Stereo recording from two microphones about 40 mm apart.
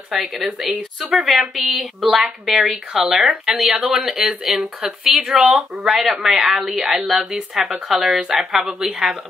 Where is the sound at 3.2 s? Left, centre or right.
Right.